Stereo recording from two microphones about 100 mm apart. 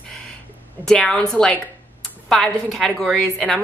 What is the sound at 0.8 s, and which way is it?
A woman's voice, 5° left (ahead or behind).